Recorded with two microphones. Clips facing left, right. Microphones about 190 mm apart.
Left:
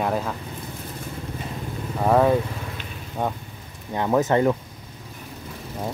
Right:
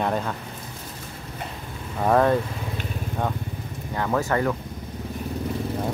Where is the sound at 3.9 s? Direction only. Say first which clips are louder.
Left 4 dB; 20° left (ahead or behind).